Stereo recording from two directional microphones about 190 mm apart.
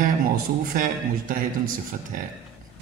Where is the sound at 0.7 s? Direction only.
45° right (ahead or behind).